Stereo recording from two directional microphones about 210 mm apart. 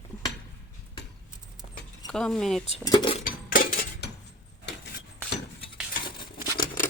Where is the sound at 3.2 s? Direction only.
40° left (ahead or behind).